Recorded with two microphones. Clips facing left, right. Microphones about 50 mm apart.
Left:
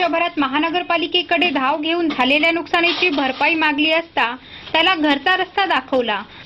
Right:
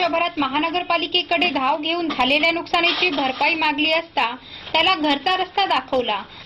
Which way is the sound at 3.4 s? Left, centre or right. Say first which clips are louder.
Left 4 dB; left.